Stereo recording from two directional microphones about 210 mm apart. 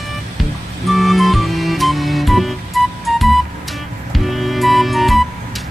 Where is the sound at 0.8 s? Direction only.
Centre (ahead or behind).